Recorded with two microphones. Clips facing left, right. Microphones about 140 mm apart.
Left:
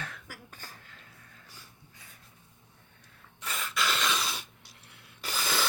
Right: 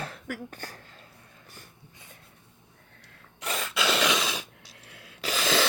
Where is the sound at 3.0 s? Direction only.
80° right.